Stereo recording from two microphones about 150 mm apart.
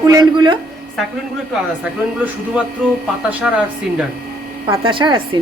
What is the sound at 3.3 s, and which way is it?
Speech, 5° right (ahead or behind).